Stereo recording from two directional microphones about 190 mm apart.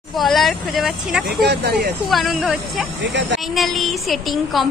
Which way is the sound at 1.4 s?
60° right (ahead or behind).